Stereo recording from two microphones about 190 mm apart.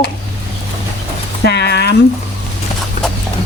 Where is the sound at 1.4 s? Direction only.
60° left (ahead or behind).